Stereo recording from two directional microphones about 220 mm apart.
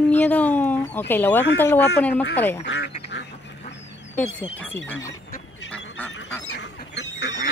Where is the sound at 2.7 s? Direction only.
55° left (ahead or behind).